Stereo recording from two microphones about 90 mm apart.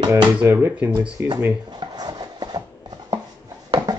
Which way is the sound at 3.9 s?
45° right (ahead or behind).